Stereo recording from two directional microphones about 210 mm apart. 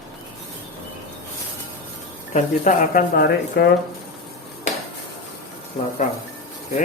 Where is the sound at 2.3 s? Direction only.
40° left (ahead or behind).